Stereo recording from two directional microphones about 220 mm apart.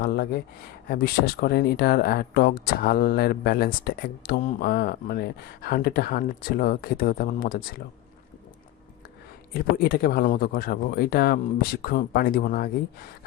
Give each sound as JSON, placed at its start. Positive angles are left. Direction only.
{"t": 0.0, "sound": "speech", "side_deg": 45}
{"t": 9.5, "sound": "speech", "side_deg": 40}